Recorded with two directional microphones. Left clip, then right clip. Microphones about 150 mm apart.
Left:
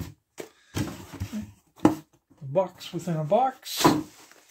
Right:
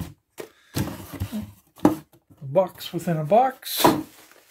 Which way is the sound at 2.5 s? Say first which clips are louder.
Right 4 dB; 30° right (ahead or behind).